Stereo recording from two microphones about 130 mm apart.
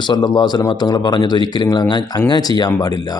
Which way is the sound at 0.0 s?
35° left (ahead or behind).